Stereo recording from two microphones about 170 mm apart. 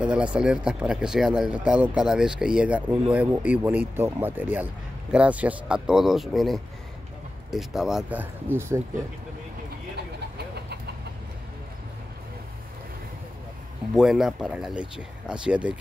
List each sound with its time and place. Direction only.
0.0 s speech: 5° right (ahead or behind)
9.9 s vehicle: 75° right (ahead or behind)
13.9 s speech: centre (ahead or behind)